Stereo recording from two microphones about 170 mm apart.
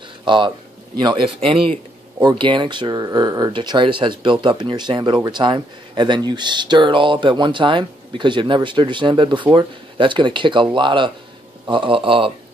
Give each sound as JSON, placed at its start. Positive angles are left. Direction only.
{"t": 0.2, "sound": "speech", "side_deg": -30}